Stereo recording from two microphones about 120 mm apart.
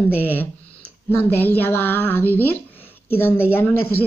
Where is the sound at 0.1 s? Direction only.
15° left (ahead or behind).